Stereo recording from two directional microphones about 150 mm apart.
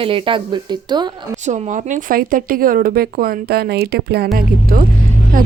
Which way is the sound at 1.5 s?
55° right (ahead or behind).